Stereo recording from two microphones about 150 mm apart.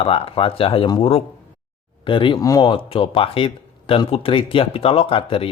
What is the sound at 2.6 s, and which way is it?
A man's voice, 35° left (ahead or behind).